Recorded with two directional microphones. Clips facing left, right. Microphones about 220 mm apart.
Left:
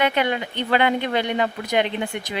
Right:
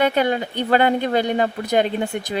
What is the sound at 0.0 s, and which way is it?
Speech, 40° right (ahead or behind).